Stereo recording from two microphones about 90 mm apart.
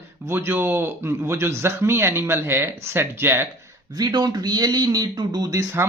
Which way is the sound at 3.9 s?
50° right (ahead or behind).